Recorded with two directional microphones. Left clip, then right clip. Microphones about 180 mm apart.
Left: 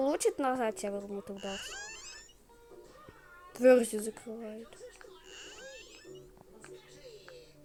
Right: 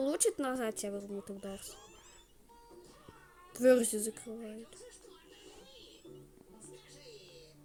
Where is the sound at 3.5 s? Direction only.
10° right (ahead or behind).